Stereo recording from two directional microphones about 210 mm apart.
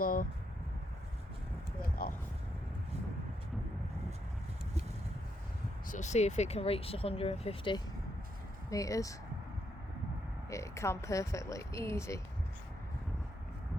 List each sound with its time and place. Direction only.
0.0 s speech: 45° left (ahead or behind)
1.8 s a sound: 45° left (ahead or behind)
5.9 s speech: 35° left (ahead or behind)
8.7 s speech: 15° left (ahead or behind)
10.5 s speech: 15° left (ahead or behind)